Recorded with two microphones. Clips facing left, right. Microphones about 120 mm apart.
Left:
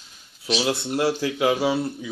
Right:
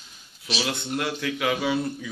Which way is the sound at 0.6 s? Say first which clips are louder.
Left 5 dB; 30° left (ahead or behind).